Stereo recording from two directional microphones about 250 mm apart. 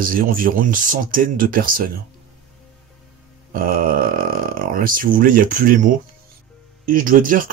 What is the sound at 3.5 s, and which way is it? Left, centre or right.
Speech, right.